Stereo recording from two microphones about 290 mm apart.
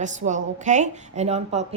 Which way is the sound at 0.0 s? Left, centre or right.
Right.